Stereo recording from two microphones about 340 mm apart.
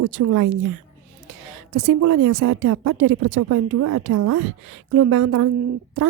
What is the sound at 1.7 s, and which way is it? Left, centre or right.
A woman's voice, right.